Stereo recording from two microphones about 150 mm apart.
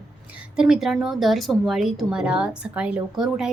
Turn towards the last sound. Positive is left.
turn(degrees=-5)  # may be behind; listen again after turning